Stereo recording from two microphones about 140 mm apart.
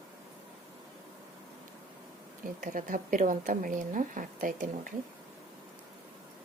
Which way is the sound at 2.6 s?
70° right (ahead or behind).